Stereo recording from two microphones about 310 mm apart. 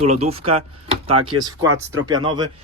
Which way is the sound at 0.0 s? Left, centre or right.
Centre.